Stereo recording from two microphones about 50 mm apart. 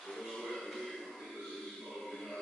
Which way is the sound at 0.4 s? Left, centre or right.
Centre.